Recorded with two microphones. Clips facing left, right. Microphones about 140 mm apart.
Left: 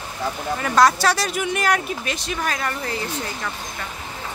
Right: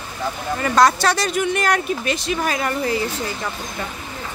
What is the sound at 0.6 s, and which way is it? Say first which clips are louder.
Speech: right 1 dB; centre (ahead or behind).